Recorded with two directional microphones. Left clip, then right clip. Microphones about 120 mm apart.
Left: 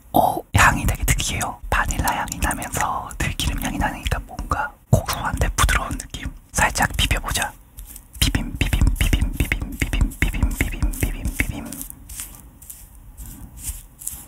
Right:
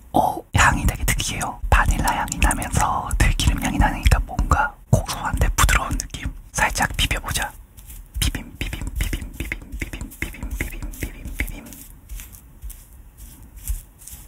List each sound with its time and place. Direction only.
0.1 s throat clearing: 15° left (ahead or behind)
2.3 s speech: centre (ahead or behind)
3.7 s whispering: centre (ahead or behind)
5.1 s whispering: 10° left (ahead or behind)
6.5 s whispering: 15° left (ahead or behind)
8.2 s a sound: 35° left (ahead or behind)
11.0 s whispering: 35° left (ahead or behind)